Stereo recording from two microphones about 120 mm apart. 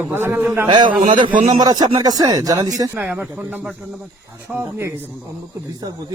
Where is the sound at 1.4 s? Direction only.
80° right.